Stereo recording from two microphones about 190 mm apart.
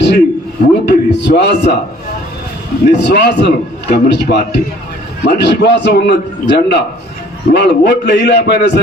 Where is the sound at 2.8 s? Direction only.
65° left (ahead or behind).